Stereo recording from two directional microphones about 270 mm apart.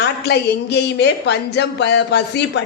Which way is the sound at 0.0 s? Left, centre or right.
Left.